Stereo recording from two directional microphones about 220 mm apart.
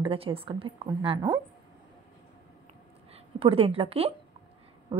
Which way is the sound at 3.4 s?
25° right (ahead or behind).